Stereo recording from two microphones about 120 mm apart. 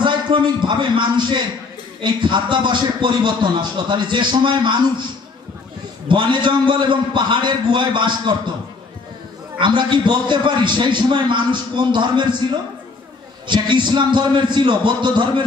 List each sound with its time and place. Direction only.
0.0 s a man's voice: 40° right (ahead or behind)
6.0 s a man's voice: 40° right (ahead or behind)
9.6 s a man's voice: 40° right (ahead or behind)
13.5 s a man's voice: 40° right (ahead or behind)